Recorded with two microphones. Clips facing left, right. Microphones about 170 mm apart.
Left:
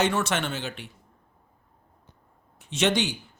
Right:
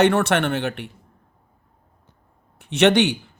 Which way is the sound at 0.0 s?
60° right (ahead or behind).